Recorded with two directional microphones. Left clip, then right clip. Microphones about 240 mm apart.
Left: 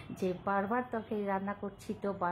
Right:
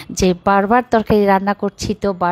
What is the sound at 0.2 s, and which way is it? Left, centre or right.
A woman's voice, right.